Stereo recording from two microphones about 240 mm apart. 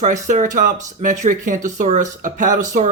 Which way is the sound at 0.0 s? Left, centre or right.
Right.